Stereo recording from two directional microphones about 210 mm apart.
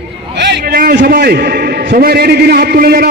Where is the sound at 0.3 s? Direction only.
55° right (ahead or behind).